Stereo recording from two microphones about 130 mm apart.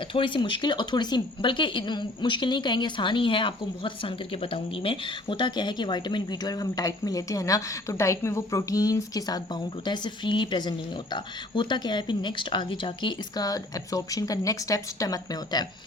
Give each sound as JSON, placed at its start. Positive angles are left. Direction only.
{"t": 0.1, "sound": "speech", "side_deg": 40}